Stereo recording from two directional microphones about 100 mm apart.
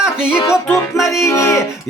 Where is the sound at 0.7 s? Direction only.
30° left (ahead or behind).